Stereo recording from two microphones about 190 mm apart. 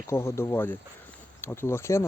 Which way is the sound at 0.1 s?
15° left (ahead or behind).